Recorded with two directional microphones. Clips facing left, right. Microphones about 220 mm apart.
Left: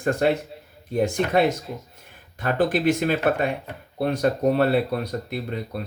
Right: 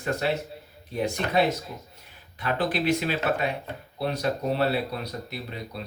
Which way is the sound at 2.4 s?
45° left (ahead or behind).